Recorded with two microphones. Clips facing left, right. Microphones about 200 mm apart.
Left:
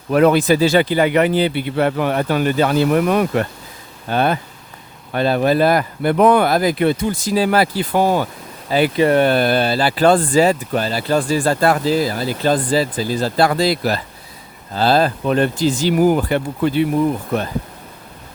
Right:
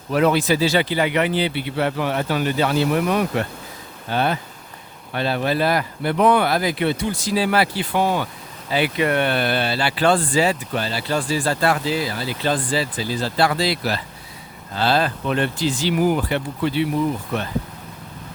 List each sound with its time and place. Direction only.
0.1 s speech: 55° left (ahead or behind)